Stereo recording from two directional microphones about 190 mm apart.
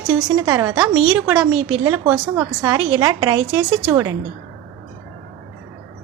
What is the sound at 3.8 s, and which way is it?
Speech, 10° right (ahead or behind).